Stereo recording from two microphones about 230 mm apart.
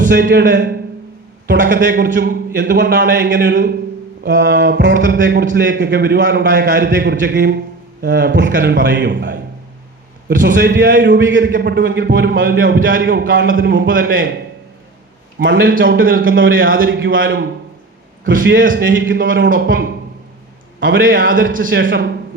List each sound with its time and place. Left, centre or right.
0.1 s a man's voice: right
1.5 s a man's voice: right
13.1 s a man's voice: right
13.8 s a man's voice: right
15.5 s a man's voice: right
18.4 s a man's voice: right
19.1 s a man's voice: right
19.5 s a man's voice: right
21.3 s a man's voice: right
21.7 s a man's voice: right